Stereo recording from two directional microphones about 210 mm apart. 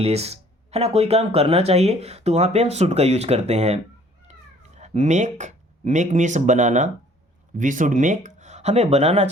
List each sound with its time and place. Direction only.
0.0 s speech: 30° right (ahead or behind)